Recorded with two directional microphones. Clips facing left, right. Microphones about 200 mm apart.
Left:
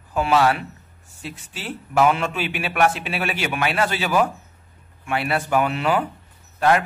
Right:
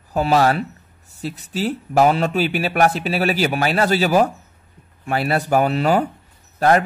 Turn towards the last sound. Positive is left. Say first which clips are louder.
# right 3 dB
turn(degrees=-40)  # may be behind; listen again after turning